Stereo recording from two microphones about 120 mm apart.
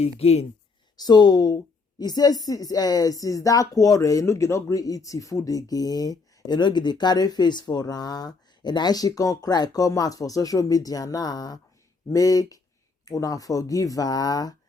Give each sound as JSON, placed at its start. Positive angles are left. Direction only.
{"t": 0.0, "sound": "speech", "side_deg": 60}
{"t": 0.9, "sound": "a woman's voice", "side_deg": 35}